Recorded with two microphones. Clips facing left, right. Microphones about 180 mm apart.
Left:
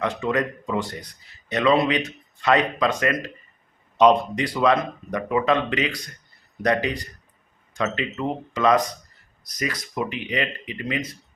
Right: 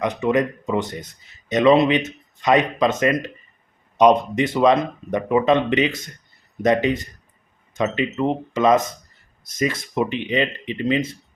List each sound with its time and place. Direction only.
0.0 s speech: 20° right (ahead or behind)